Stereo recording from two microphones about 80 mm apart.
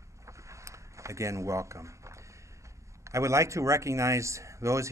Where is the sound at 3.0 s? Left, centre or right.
Right.